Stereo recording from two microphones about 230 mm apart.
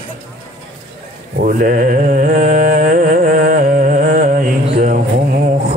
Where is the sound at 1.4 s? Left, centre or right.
Right.